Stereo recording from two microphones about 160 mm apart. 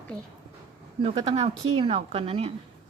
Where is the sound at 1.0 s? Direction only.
40° right (ahead or behind).